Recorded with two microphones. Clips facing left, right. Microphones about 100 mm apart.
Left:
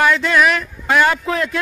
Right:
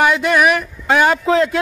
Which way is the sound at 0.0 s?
20° right (ahead or behind).